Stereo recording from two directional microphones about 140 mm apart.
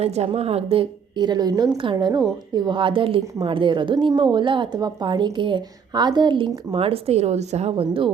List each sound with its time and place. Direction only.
0.0 s a woman's voice: 50° right (ahead or behind)